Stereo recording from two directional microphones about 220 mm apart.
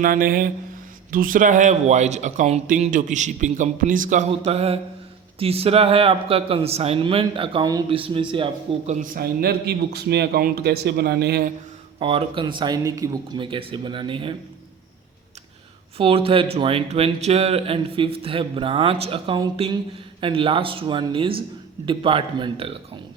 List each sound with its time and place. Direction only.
0.0 s speech: 40° right (ahead or behind); by 8.4 s 25° right (ahead or behind)
8.9 s a man's voice: 40° right (ahead or behind)
11.9 s speech: 25° right (ahead or behind)
16.0 s speech: 25° right (ahead or behind)